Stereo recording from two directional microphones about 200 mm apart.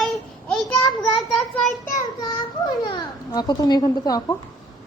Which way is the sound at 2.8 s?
20° left (ahead or behind).